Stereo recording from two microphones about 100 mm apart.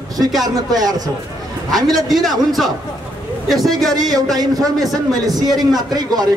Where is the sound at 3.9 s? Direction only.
40° right (ahead or behind).